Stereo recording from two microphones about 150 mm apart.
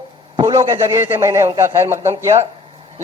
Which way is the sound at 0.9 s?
20° right (ahead or behind).